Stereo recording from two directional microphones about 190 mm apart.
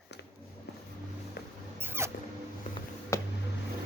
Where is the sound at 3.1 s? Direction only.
15° left (ahead or behind).